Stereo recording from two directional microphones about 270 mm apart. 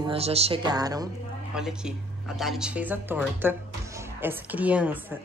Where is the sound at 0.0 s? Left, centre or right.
Right.